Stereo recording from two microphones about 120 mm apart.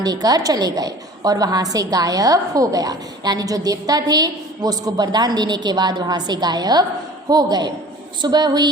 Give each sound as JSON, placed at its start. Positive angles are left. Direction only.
{"t": 0.0, "sound": "a woman's voice", "side_deg": -30}